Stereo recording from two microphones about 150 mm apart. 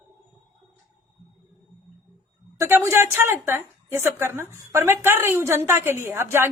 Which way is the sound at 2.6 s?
20° right (ahead or behind).